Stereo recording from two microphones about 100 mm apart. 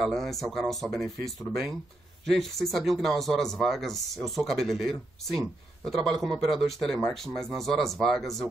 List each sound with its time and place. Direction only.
0.0 s speech: centre (ahead or behind)